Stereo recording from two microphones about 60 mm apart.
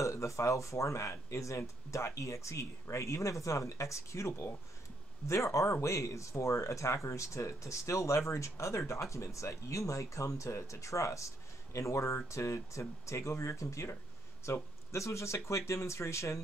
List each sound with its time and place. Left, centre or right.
0.0 s speech: left